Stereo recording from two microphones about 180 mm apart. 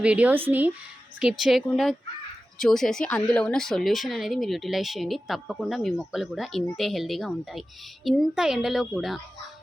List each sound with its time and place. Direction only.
0.0 s a woman's voice: 5° right (ahead or behind)